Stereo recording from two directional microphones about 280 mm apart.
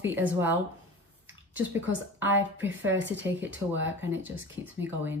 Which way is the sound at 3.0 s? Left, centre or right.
Right.